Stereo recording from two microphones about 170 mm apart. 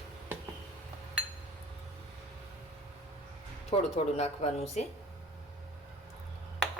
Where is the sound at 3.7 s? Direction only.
30° left (ahead or behind).